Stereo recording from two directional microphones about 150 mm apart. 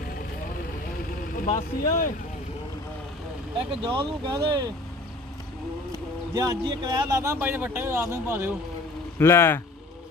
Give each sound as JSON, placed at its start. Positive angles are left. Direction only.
{"t": 1.3, "sound": "speech", "side_deg": 60}
{"t": 3.5, "sound": "speech", "side_deg": -30}
{"t": 6.3, "sound": "a man's voice", "side_deg": -25}
{"t": 9.2, "sound": "speech", "side_deg": 15}